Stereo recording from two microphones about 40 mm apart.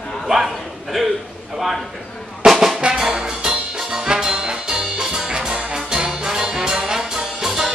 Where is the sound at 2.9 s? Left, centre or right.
Centre.